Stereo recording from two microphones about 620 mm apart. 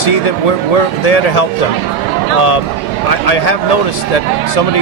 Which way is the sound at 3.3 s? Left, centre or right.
Left.